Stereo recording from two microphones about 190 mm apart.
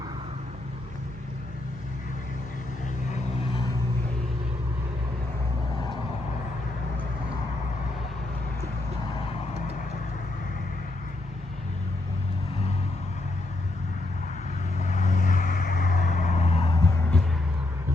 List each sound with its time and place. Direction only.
14.8 s vehicle: 40° left (ahead or behind)